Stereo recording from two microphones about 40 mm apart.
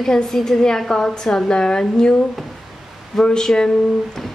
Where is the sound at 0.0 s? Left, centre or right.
Centre.